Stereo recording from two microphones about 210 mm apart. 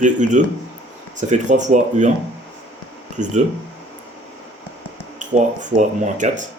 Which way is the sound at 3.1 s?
35° right (ahead or behind).